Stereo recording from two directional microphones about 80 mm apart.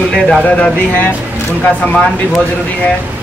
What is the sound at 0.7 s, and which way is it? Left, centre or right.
A man's voice, left.